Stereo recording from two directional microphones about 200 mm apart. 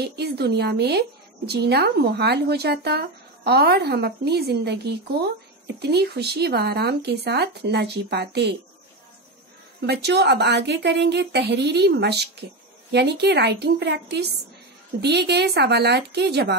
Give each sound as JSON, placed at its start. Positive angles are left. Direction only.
{"t": 0.0, "sound": "a woman's voice", "side_deg": -55}
{"t": 9.8, "sound": "a woman's voice", "side_deg": -55}